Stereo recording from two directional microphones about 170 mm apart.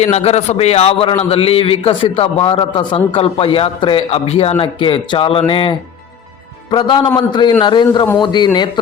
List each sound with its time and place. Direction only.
0.0 s a man's voice: 40° left (ahead or behind)